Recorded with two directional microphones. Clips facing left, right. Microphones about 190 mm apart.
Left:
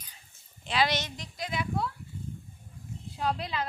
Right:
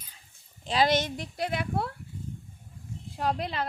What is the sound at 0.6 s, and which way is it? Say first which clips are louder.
A woman's voice: right 4 dB; 40° right (ahead or behind).